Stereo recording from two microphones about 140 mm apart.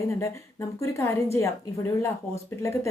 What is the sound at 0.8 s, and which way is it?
A woman's voice, 20° left (ahead or behind).